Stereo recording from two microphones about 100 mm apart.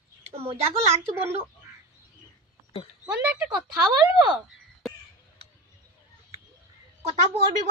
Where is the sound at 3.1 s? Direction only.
10° right (ahead or behind).